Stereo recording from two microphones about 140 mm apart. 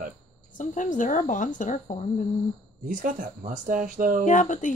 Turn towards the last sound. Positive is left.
turn(degrees=65)  # may be behind; listen again after turning